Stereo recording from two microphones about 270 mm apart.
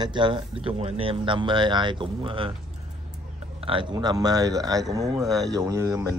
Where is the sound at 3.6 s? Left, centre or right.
Centre.